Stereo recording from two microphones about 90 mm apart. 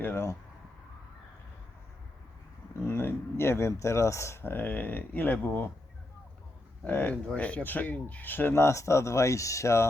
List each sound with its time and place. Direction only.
0.0 s speech: 25° left (ahead or behind)
2.8 s speech: 25° left (ahead or behind)
6.8 s speech: 20° left (ahead or behind); by 9.8 s 35° left (ahead or behind)